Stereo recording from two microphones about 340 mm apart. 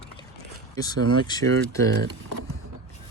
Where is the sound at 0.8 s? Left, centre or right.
Centre.